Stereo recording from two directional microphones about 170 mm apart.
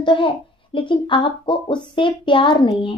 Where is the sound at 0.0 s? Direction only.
30° left (ahead or behind).